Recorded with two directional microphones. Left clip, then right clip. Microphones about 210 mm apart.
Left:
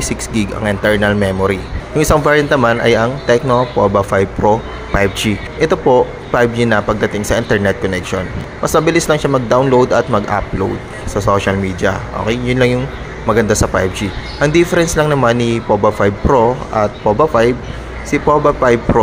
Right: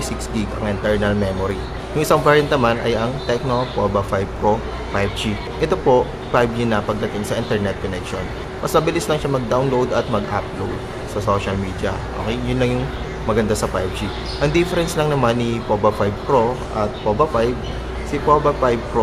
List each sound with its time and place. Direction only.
0.0 s speech: 30° left (ahead or behind)